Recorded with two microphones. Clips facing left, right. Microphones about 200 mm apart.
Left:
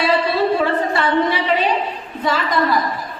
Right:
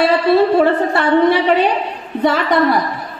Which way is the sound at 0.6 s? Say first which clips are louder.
Right 5 dB; 60° right (ahead or behind).